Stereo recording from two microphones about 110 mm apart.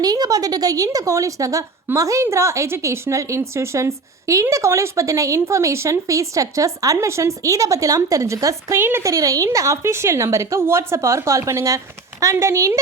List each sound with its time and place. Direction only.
0.0 s a woman's voice: 35° right (ahead or behind)
8.8 s a woman's voice: 20° right (ahead or behind)